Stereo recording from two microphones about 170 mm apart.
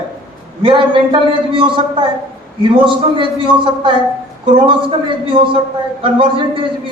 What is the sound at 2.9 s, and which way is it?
A man's voice, 30° right (ahead or behind).